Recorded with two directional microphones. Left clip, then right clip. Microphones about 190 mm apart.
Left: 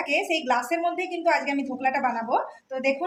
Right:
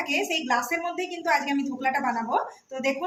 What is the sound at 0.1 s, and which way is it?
A woman's voice, 25° left (ahead or behind).